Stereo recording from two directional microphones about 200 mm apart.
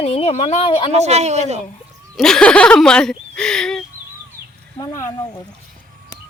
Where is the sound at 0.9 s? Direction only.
35° right (ahead or behind).